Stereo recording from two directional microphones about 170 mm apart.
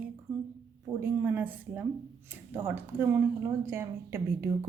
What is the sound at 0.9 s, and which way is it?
A woman's voice, 15° right (ahead or behind).